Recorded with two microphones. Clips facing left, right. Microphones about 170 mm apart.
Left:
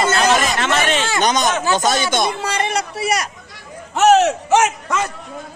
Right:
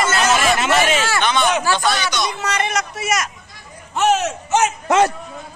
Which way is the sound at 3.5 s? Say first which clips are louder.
Left 3 dB; 85° left.